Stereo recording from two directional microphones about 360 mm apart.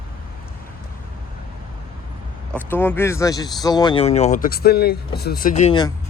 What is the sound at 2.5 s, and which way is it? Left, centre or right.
Speech, centre.